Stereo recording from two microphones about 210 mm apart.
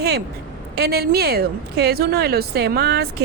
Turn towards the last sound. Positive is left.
turn(degrees=-50)  # may be behind; listen again after turning